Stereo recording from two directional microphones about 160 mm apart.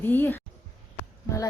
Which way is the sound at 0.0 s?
10° left (ahead or behind).